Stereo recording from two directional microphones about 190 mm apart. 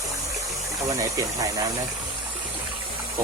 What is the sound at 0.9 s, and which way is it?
Speech, 20° right (ahead or behind).